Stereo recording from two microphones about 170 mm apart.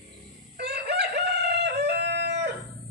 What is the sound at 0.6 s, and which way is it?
Chicken, 80° right.